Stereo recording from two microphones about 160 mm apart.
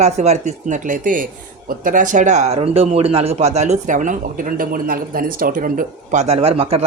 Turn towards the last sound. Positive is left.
turn(degrees=-35)  # may be behind; listen again after turning